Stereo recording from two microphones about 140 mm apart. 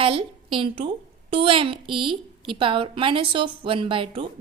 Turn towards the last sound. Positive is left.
turn(degrees=-40)  # may be behind; listen again after turning